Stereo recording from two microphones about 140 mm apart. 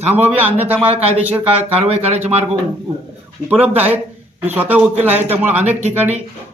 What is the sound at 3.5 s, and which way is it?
Speech, 10° right (ahead or behind).